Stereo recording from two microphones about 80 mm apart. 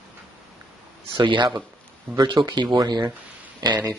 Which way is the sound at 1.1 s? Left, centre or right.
Right.